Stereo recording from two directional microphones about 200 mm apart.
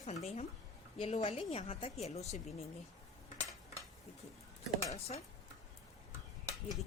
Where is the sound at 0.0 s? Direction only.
35° left (ahead or behind).